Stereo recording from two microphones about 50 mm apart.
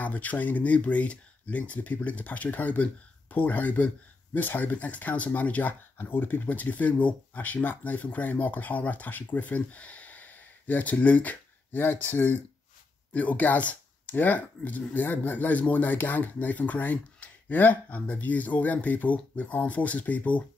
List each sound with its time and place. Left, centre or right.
0.0 s speech: left
5.9 s speech: left
13.1 s speech: left